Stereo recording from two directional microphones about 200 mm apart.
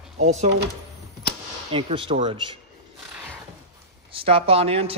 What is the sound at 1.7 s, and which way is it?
Speech, 25° right (ahead or behind).